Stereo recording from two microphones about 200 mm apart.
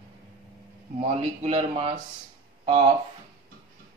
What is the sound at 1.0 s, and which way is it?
Speech, 30° right (ahead or behind).